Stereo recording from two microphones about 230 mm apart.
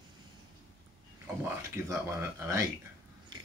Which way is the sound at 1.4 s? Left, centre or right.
Centre.